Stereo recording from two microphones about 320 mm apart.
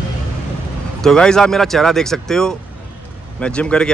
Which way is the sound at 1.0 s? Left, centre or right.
Centre.